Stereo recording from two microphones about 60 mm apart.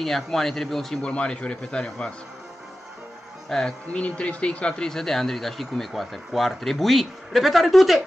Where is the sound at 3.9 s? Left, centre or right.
Left.